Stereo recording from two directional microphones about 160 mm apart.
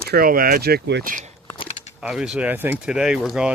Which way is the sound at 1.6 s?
45° left (ahead or behind).